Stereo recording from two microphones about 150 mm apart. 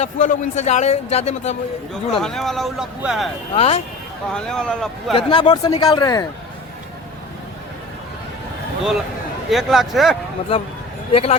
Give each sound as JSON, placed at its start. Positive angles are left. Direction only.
{"t": 0.0, "sound": "a man's voice", "side_deg": 55}
{"t": 1.9, "sound": "speech", "side_deg": 5}
{"t": 3.5, "sound": "speech", "side_deg": 40}
{"t": 4.3, "sound": "speech", "side_deg": 5}
{"t": 5.1, "sound": "speech", "side_deg": 30}
{"t": 9.5, "sound": "speech", "side_deg": 0}
{"t": 11.1, "sound": "speech", "side_deg": 40}